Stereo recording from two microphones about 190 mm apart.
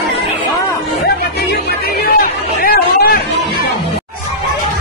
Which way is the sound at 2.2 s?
50° left (ahead or behind).